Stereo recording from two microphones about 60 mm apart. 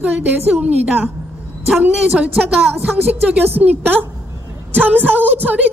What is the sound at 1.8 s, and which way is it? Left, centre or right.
A woman's voice, right.